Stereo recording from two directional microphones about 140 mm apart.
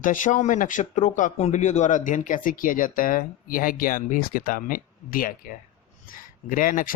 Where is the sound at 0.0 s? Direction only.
65° left (ahead or behind); by 5.5 s 85° left.